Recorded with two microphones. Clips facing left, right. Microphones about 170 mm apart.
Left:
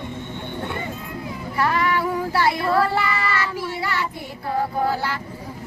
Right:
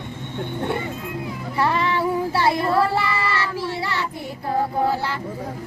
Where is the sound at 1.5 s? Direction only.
25° right (ahead or behind).